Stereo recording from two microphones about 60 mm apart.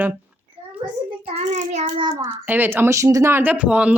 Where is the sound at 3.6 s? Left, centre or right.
Right.